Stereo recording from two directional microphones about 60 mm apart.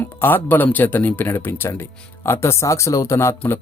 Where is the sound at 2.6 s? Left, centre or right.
Left.